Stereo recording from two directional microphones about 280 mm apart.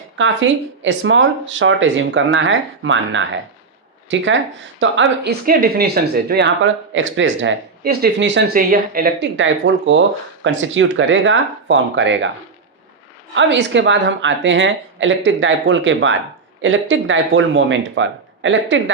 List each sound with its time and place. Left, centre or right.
0.2 s speech: right
13.3 s speech: right